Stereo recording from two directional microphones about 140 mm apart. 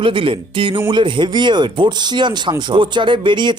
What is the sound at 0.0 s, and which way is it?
Speech, 35° right (ahead or behind).